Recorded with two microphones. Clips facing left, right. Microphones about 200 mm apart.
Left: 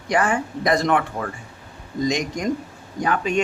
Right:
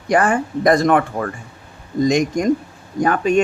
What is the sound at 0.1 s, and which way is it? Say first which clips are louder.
Speech: right 5 dB; 50° right (ahead or behind).